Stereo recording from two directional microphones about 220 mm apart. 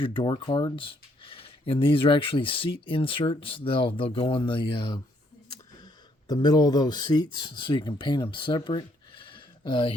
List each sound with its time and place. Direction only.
0.0 s speech: 20° left (ahead or behind)